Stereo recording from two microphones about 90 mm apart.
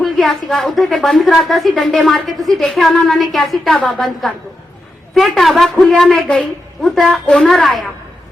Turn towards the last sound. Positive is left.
turn(degrees=5)  # may be behind; listen again after turning